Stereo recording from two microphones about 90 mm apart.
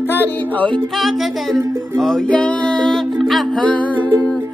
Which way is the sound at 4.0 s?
25° right (ahead or behind).